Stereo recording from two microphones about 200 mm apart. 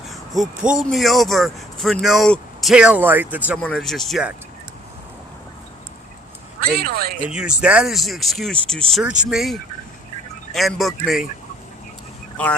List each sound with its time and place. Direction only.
0.1 s speech: centre (ahead or behind)
3.6 s speech: 5° left (ahead or behind)
6.6 s a man's voice: 50° right (ahead or behind)
7.3 s speech: 5° right (ahead or behind)